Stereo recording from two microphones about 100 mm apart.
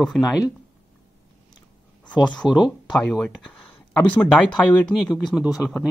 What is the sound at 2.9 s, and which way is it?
Speech, 10° left (ahead or behind).